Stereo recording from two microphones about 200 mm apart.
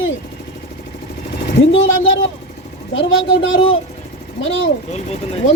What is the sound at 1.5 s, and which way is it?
Speech, 70° left (ahead or behind).